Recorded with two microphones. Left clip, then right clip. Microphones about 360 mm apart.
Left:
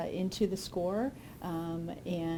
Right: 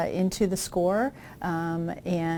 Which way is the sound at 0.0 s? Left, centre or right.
Right.